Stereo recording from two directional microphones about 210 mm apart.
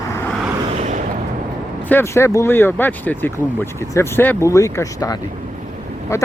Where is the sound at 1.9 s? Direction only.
10° left (ahead or behind).